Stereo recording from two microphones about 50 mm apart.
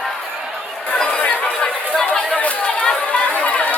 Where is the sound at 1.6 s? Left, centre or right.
Left.